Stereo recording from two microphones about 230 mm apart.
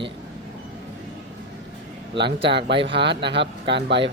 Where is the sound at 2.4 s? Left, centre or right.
Right.